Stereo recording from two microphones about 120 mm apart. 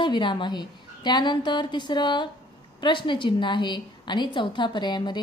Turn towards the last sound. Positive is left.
turn(degrees=40)  # may be behind; listen again after turning